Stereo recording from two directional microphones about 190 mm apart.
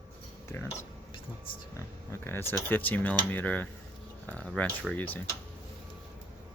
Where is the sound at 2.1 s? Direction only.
10° left (ahead or behind).